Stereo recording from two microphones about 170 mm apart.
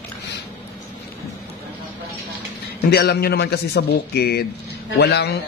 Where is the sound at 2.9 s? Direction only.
70° left (ahead or behind).